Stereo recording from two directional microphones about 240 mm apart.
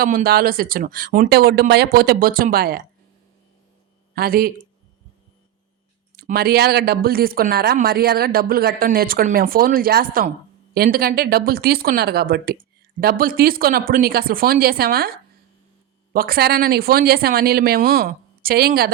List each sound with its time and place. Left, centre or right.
0.0 s speech: right
4.1 s speech: right
6.1 s speech: right
16.1 s speech: right